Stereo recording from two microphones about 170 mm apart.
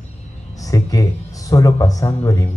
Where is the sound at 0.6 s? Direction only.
20° left (ahead or behind).